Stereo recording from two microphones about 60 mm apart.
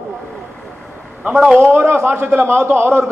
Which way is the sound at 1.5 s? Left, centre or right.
Right.